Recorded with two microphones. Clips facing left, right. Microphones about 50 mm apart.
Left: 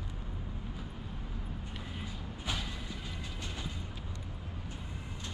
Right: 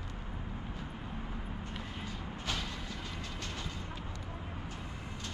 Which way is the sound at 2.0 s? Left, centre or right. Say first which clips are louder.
Even; centre.